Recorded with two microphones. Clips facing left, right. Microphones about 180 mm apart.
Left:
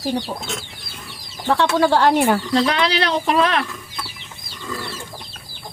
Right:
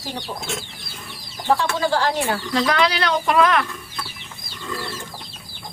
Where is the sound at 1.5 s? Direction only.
65° left (ahead or behind).